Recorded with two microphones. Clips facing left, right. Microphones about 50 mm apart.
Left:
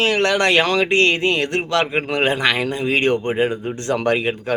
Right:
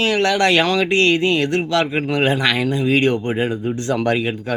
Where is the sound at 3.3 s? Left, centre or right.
Left.